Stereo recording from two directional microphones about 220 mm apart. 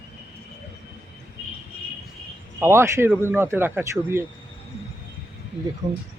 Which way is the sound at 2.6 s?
10° right (ahead or behind).